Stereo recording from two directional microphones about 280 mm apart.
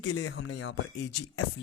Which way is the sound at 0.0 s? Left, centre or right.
Left.